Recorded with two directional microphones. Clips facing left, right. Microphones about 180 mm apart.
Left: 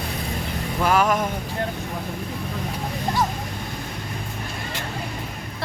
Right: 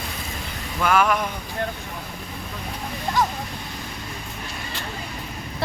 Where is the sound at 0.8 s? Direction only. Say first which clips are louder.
Even; 35° left (ahead or behind).